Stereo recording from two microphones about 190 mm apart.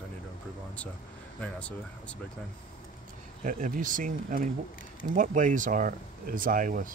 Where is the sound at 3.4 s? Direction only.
45° right (ahead or behind).